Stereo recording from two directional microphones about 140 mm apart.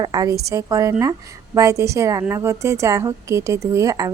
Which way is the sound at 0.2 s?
25° right (ahead or behind).